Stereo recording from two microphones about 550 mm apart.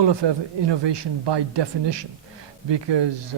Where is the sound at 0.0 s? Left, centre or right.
Right.